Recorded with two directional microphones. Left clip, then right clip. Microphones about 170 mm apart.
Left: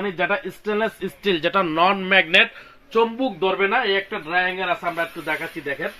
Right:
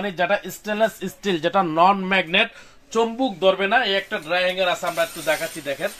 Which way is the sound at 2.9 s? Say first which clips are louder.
Left 1 dB; 85° right.